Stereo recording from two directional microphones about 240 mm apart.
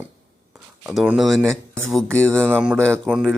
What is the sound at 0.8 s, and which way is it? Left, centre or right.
Speech, centre.